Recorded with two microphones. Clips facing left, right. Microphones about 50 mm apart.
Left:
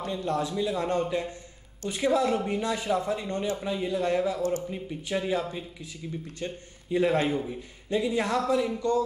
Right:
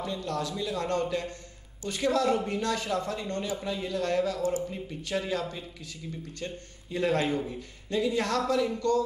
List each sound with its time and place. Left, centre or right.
0.0 s a man's voice: left
6.4 s a man's voice: centre